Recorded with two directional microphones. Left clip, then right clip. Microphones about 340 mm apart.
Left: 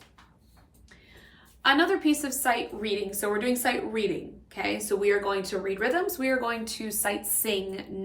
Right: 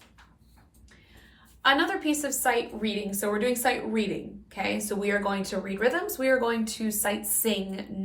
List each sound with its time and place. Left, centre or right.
1.6 s speech: centre